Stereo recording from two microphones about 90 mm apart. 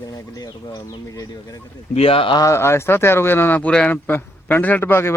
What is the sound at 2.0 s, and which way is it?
Speech, 90° left.